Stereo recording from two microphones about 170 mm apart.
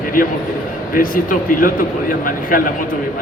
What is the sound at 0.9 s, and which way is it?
A man's voice, 55° left (ahead or behind).